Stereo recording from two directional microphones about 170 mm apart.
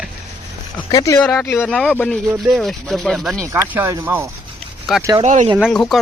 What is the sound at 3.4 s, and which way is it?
Speech, 15° right (ahead or behind).